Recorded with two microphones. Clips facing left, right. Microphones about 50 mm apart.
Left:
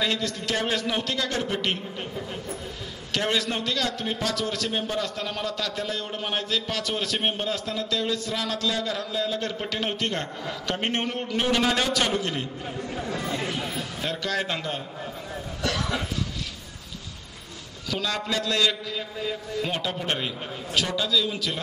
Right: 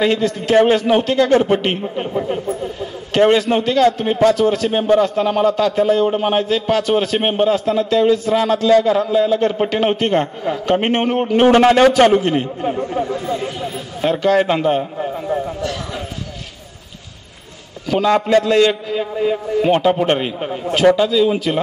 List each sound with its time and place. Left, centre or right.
0.0 s a man's voice: right
17.8 s a man's voice: right